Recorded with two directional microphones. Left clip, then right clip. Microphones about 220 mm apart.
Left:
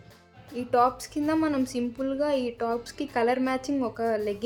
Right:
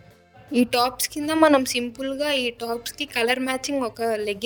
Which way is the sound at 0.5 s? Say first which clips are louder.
Right 6 dB; 45° right (ahead or behind).